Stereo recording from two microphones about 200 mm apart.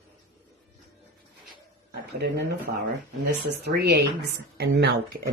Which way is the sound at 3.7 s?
55° right (ahead or behind).